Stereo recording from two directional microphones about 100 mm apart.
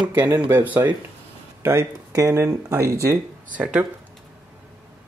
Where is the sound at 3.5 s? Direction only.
15° right (ahead or behind).